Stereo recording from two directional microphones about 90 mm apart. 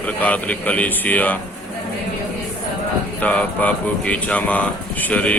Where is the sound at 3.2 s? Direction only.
15° left (ahead or behind).